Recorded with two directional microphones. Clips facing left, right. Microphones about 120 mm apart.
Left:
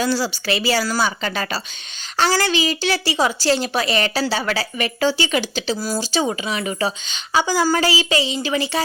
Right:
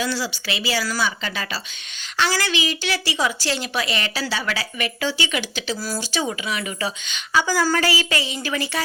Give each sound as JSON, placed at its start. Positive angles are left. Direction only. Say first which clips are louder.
{"t": 0.0, "sound": "a woman's voice", "louder": "left 5 dB", "side_deg": 35}